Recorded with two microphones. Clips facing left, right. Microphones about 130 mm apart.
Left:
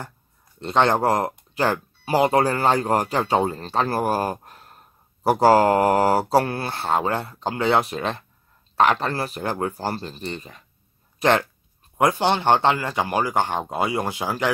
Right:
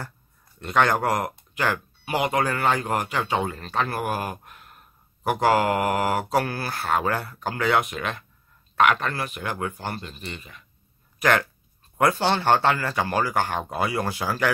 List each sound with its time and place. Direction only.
0.6 s speech: 25° left (ahead or behind)